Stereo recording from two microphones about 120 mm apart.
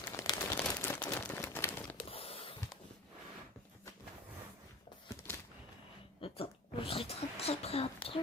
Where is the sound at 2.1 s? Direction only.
50° left (ahead or behind).